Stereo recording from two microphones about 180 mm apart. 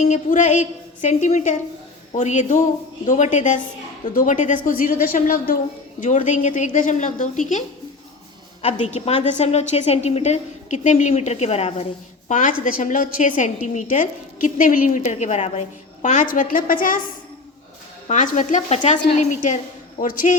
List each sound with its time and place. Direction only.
0.0 s a woman's voice: 45° left (ahead or behind)
8.6 s a woman's voice: 35° left (ahead or behind)
12.3 s a woman's voice: 45° left (ahead or behind)
18.1 s a woman's voice: 40° left (ahead or behind)